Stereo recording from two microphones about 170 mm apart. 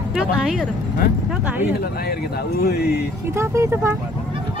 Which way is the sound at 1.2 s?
10° right (ahead or behind).